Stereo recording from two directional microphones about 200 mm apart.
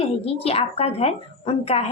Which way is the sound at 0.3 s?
30° left (ahead or behind).